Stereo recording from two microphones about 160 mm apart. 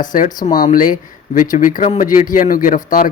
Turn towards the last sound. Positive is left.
turn(degrees=55)  # may be behind; listen again after turning